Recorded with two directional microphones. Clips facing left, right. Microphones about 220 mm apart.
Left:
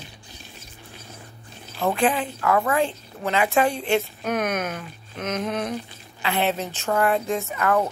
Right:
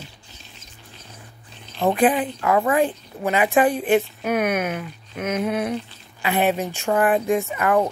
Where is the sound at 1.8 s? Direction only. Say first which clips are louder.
Right 4 dB; 15° right (ahead or behind).